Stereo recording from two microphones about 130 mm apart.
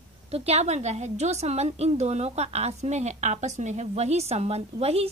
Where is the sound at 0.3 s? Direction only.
50° right (ahead or behind).